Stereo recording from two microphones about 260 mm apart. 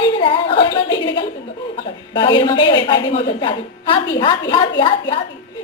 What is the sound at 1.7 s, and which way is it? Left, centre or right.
A woman's voice, centre.